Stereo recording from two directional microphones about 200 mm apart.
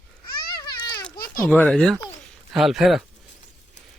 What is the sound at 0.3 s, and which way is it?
Babbling, 50° left (ahead or behind).